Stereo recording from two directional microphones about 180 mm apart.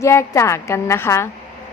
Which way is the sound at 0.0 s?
15° left (ahead or behind).